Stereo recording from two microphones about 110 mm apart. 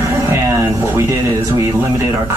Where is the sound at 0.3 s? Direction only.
25° right (ahead or behind).